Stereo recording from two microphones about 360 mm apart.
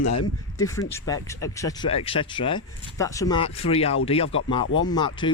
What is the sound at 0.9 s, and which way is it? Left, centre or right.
Speech, centre.